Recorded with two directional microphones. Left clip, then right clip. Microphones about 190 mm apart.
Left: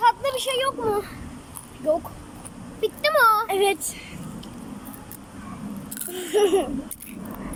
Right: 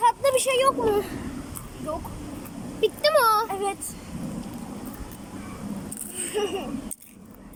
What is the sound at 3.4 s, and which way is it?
Speech, 35° left (ahead or behind).